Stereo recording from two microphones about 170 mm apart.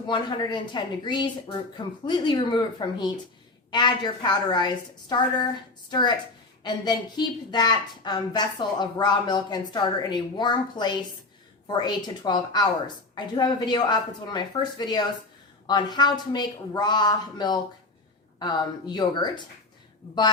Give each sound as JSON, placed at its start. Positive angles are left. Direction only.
{"t": 0.1, "sound": "a woman's voice", "side_deg": 25}